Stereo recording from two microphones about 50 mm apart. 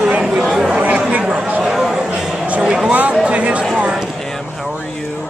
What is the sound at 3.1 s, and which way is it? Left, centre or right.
Speech, right.